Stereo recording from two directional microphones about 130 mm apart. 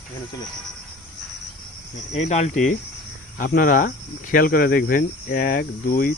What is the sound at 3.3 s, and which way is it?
Speech, 90° left.